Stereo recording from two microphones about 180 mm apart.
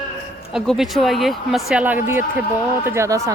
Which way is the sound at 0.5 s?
Centre (ahead or behind).